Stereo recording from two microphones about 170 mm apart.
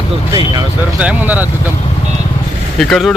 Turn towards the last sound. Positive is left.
turn(degrees=0)  # may be behind; listen again after turning